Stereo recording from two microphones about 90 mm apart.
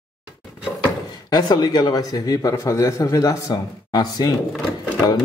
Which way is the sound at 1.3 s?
50° left (ahead or behind).